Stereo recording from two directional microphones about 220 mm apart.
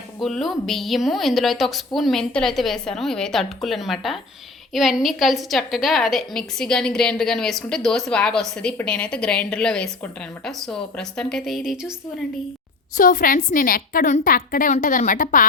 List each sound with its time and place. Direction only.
0.2 s a woman's voice: centre (ahead or behind)
13.0 s a woman's voice: 35° left (ahead or behind)